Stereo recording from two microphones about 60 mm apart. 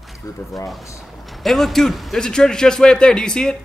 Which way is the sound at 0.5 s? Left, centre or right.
Centre.